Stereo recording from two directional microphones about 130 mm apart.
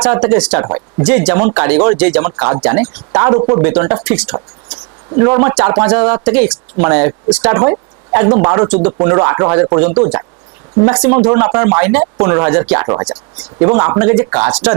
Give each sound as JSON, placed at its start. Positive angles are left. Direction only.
{"t": 0.0, "sound": "speech", "side_deg": -15}
{"t": 0.6, "sound": "speech", "side_deg": -25}
{"t": 1.0, "sound": "speech", "side_deg": -15}
{"t": 3.6, "sound": "speech", "side_deg": -20}
{"t": 5.1, "sound": "speech", "side_deg": -25}
{"t": 7.5, "sound": "speech", "side_deg": -25}
{"t": 10.0, "sound": "speech", "side_deg": -30}
{"t": 10.8, "sound": "speech", "side_deg": -15}
{"t": 11.3, "sound": "speech", "side_deg": -25}